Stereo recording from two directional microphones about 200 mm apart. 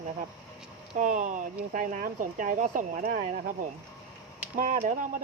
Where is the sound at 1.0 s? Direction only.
40° right (ahead or behind).